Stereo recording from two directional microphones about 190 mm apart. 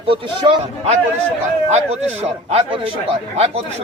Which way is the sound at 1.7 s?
35° right (ahead or behind).